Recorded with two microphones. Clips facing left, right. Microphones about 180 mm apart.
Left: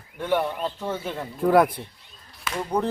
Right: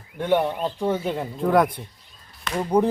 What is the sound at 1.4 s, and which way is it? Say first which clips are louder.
Speech: left 1 dB; 5° left (ahead or behind).